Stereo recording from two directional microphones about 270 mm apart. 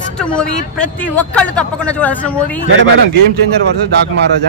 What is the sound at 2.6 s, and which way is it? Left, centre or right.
Speech, right.